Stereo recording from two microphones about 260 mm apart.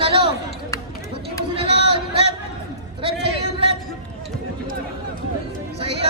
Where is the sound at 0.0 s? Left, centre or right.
Right.